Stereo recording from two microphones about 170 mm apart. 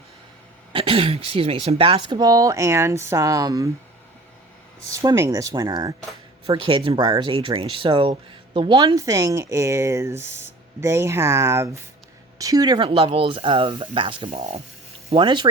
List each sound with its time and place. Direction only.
0.7 s speech: 30° right (ahead or behind)
4.9 s speech: 20° right (ahead or behind)
6.4 s speech: 30° right (ahead or behind)
14.3 s speech: 45° right (ahead or behind)
15.1 s speech: 30° right (ahead or behind)